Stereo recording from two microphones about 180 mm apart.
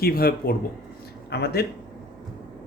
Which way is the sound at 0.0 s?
55° left (ahead or behind).